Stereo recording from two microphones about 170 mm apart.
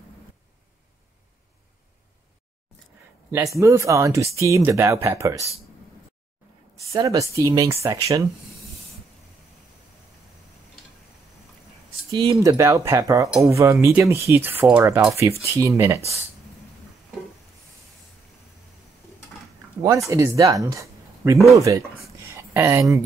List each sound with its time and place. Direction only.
3.3 s speech: 15° right (ahead or behind)
6.8 s speech: 20° right (ahead or behind)
12.1 s speech: 25° right (ahead or behind)
20.1 s speech: 15° right (ahead or behind)
22.3 s a sound: 15° right (ahead or behind)